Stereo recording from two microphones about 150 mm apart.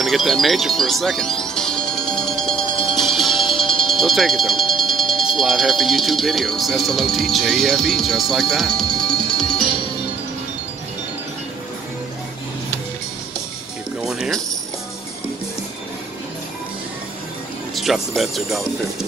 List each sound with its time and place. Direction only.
0.0 s music: centre (ahead or behind)
5.4 s speech: centre (ahead or behind)
9.6 s music: 35° left (ahead or behind)
14.0 s music: 5° right (ahead or behind)
17.7 s speech: centre (ahead or behind)